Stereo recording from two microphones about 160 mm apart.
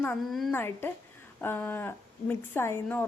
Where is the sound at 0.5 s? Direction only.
15° left (ahead or behind).